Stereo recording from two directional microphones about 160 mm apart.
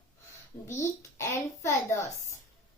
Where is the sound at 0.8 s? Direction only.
15° left (ahead or behind).